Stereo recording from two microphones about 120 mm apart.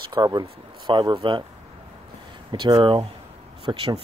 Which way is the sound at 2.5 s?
40° right (ahead or behind).